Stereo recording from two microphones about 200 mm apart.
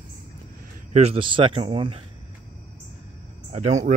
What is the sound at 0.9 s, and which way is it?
Speech, 30° right (ahead or behind).